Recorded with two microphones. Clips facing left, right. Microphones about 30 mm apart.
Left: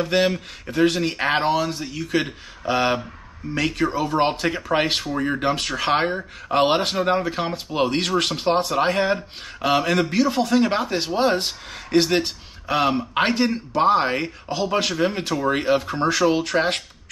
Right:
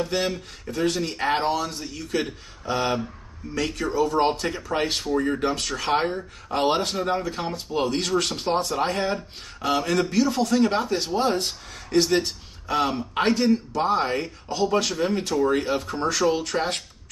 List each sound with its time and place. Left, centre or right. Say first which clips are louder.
0.0 s speech: left 5 dB; left